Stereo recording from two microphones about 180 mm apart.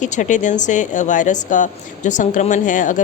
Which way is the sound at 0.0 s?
45° left (ahead or behind).